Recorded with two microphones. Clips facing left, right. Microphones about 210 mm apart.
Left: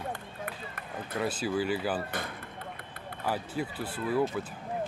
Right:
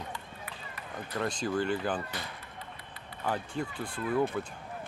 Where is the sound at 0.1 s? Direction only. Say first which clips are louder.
Left 5 dB; 55° left (ahead or behind).